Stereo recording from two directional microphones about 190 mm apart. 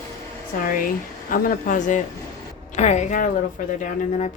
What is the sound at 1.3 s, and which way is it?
A woman's voice, 45° left (ahead or behind).